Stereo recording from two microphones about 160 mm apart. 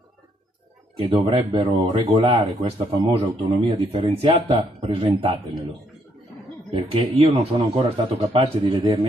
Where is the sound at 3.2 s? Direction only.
35° right (ahead or behind).